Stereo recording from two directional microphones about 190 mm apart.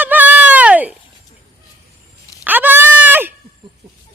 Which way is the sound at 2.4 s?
10° right (ahead or behind).